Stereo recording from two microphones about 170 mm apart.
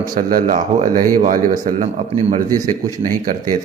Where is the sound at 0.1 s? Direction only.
55° right (ahead or behind).